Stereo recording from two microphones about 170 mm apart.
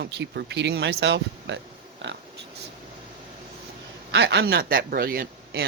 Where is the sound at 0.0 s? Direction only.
80° right.